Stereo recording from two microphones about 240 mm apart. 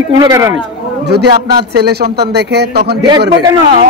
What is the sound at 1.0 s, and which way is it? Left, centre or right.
A man's voice, right.